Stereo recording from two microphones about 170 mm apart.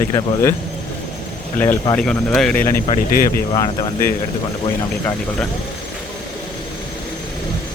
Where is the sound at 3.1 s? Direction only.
60° left (ahead or behind).